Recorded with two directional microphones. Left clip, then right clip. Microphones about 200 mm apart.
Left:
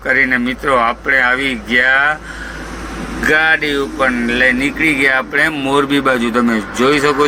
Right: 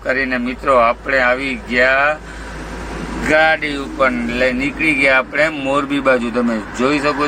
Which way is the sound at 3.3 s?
10° left (ahead or behind).